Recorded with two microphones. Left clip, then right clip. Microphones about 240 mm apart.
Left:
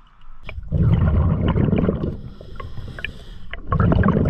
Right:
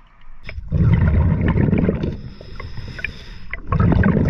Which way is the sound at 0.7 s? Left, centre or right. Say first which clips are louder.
Right 1 dB; left.